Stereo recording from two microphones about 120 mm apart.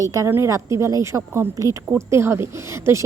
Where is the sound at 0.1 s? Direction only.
25° right (ahead or behind).